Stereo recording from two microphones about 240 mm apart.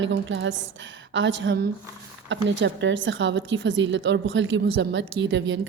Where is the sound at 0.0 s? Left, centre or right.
Right.